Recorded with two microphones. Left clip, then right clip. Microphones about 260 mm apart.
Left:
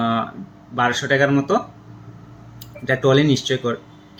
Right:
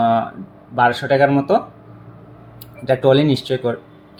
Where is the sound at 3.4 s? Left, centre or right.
Right.